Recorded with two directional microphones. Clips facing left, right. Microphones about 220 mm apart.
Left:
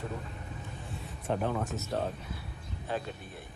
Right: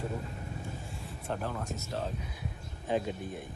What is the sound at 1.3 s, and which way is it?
Speech, centre (ahead or behind).